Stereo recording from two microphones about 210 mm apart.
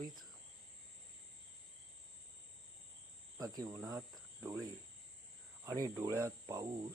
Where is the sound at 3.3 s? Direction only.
15° right (ahead or behind).